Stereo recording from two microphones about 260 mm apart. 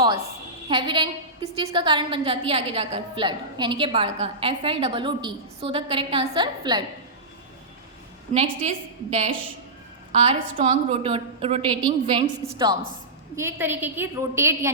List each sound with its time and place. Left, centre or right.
0.7 s a woman's voice: centre
8.3 s a woman's voice: right